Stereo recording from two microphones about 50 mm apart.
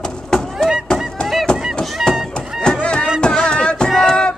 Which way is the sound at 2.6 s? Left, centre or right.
Centre.